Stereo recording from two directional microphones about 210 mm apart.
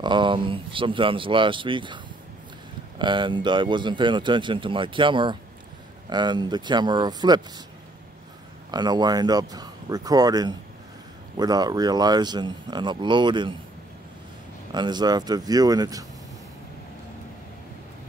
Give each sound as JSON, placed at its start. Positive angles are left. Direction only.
{"t": 0.0, "sound": "speech", "side_deg": -20}
{"t": 3.0, "sound": "speech", "side_deg": -20}
{"t": 8.7, "sound": "speech", "side_deg": -20}
{"t": 14.7, "sound": "speech", "side_deg": -20}